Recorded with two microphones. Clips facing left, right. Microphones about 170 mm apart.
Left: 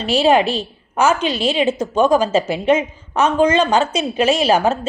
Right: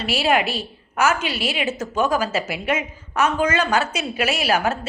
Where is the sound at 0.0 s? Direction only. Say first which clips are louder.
Left 6 dB; 20° left (ahead or behind).